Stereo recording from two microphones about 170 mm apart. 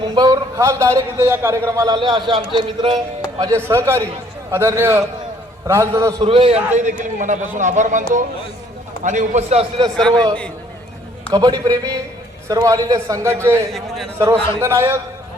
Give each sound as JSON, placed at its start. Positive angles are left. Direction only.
{"t": 0.1, "sound": "a man's voice", "side_deg": -20}
{"t": 6.2, "sound": "a man's voice", "side_deg": -35}
{"t": 7.2, "sound": "a man's voice", "side_deg": -45}
{"t": 11.3, "sound": "a man's voice", "side_deg": -25}
{"t": 13.7, "sound": "a man's voice", "side_deg": 0}
{"t": 14.2, "sound": "a man's voice", "side_deg": -15}